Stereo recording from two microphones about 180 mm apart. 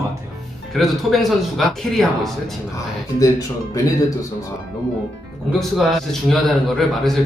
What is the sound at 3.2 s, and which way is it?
Speech, 20° left (ahead or behind).